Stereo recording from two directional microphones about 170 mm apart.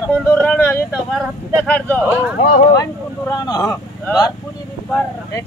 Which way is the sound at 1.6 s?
10° left (ahead or behind).